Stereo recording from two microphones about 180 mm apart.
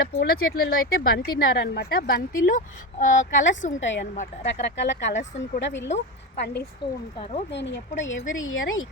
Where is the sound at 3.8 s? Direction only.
90° left.